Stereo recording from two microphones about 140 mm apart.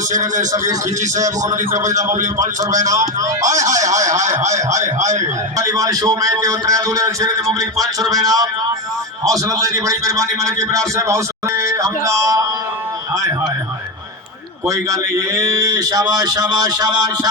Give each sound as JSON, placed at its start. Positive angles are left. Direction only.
{"t": 1.4, "sound": "a man's voice", "side_deg": -60}
{"t": 5.5, "sound": "a man's voice", "side_deg": -25}
{"t": 14.7, "sound": "a man's voice", "side_deg": -25}